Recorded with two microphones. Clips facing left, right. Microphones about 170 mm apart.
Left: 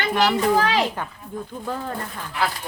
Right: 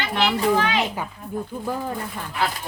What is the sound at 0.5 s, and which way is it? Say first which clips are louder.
Speech: left 2 dB; 35° left (ahead or behind).